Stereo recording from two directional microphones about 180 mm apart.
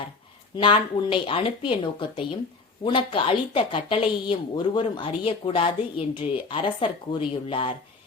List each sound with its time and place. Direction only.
0.5 s a woman's voice: 25° left (ahead or behind)